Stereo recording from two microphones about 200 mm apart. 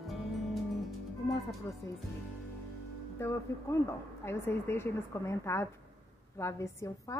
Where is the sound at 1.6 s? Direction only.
15° left (ahead or behind).